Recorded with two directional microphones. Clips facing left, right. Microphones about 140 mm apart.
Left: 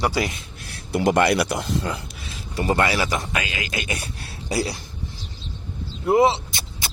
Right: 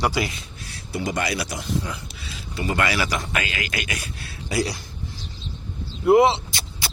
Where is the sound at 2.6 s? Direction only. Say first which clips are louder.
Left 3 dB; 35° left (ahead or behind).